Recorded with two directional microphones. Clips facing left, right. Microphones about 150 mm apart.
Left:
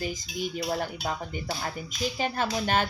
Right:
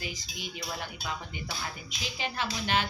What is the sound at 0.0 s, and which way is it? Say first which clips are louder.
Music: left 8 dB; 45° left (ahead or behind).